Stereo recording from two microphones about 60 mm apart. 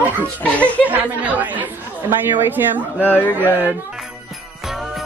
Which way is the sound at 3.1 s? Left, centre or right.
Left.